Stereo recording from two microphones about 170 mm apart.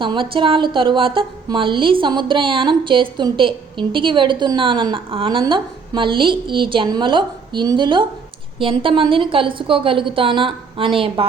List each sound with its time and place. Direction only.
0.0 s a woman's voice: 30° right (ahead or behind)